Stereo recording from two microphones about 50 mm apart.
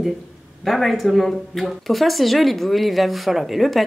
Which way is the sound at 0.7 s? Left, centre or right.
Centre.